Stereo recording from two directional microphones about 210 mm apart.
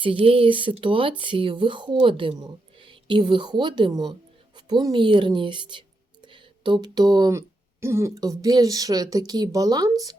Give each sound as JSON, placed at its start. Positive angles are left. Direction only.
{"t": 0.0, "sound": "speech", "side_deg": -25}